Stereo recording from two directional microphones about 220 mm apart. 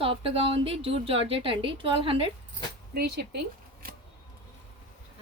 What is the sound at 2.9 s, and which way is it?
Speech, 45° right (ahead or behind).